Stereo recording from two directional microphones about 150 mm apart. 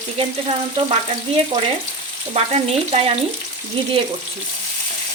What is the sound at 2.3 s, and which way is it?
Frying, 40° right (ahead or behind).